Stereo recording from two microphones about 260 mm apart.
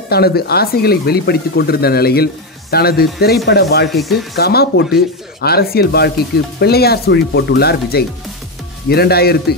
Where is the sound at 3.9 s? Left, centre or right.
Centre.